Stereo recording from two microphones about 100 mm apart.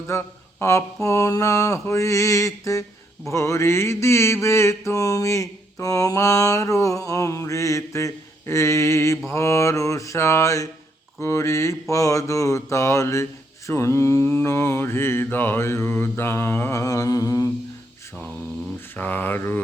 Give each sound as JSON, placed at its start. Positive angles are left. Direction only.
{"t": 0.1, "sound": "speech", "side_deg": 30}
{"t": 1.0, "sound": "mantra", "side_deg": 30}
{"t": 18.9, "sound": "mantra", "side_deg": 20}